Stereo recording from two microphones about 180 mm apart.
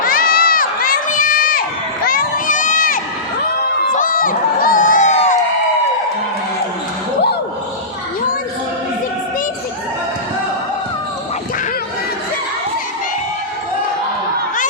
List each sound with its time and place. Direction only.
0.0 s crowd: 55° left (ahead or behind)